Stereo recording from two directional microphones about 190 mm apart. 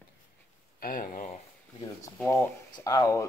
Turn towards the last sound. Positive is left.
turn(degrees=20)  # may be behind; listen again after turning